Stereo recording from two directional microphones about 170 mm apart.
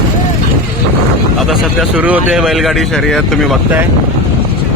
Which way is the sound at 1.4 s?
Centre (ahead or behind).